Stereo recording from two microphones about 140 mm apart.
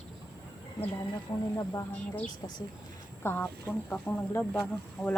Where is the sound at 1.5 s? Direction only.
20° left (ahead or behind).